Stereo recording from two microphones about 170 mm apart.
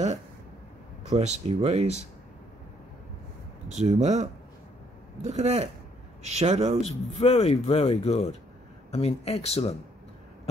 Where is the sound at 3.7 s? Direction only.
40° right (ahead or behind).